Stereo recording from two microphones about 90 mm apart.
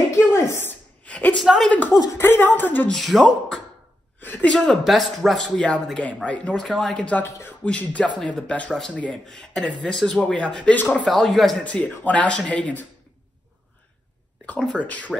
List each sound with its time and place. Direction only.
0.3 s a sound: 30° left (ahead or behind)
1.0 s a sound: 15° left (ahead or behind)
1.4 s speech: 5° right (ahead or behind)
1.7 s a woman's voice: 20° left (ahead or behind)
2.9 s speech: centre (ahead or behind)
4.2 s a woman's voice: 20° left (ahead or behind)
4.6 s speech: centre (ahead or behind)
6.2 s speech: 15° left (ahead or behind)
7.2 s speech: 30° left (ahead or behind)
7.6 s speech: 15° left (ahead or behind)
11.1 s speech: centre (ahead or behind)
11.6 s speech: 15° left (ahead or behind)
14.4 s speech: 15° left (ahead or behind)